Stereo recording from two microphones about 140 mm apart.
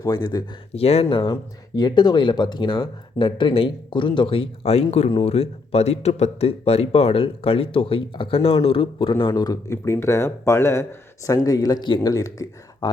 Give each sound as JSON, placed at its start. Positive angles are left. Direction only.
{"t": 0.0, "sound": "speech", "side_deg": 25}
{"t": 0.8, "sound": "speech", "side_deg": 45}